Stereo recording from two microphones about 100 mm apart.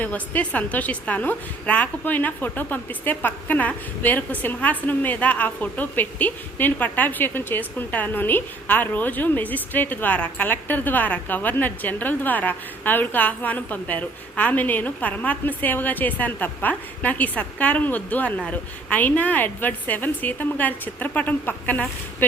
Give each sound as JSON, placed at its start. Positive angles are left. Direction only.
{"t": 0.0, "sound": "a woman's voice", "side_deg": 15}